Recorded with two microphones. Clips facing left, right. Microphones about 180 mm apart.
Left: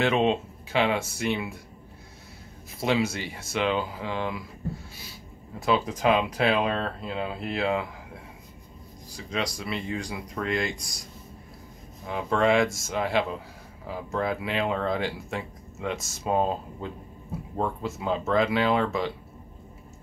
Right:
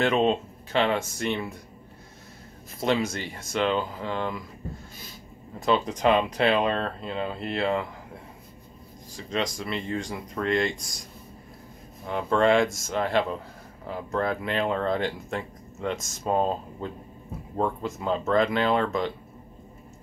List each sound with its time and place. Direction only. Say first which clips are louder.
0.0 s speech: right 1 dB; 10° left (ahead or behind)
2.8 s speech: even; 10° left (ahead or behind)
5.7 s speech: right 1 dB; 5° left (ahead or behind)
9.1 s speech: right 2 dB; centre (ahead or behind)
12.1 s speech: right 2 dB; 5° left (ahead or behind)
17.6 s speech: right 2 dB; 5° left (ahead or behind)